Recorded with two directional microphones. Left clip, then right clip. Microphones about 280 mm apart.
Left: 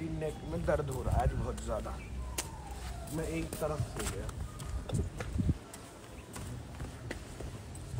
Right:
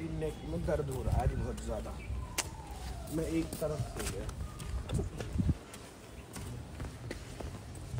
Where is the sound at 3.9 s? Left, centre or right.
Centre.